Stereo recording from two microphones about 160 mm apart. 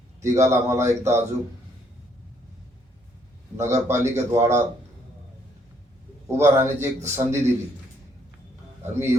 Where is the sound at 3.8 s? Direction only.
15° right (ahead or behind).